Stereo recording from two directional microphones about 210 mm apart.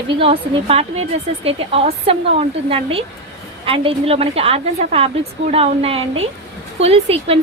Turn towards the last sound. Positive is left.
turn(degrees=-30)  # may be behind; listen again after turning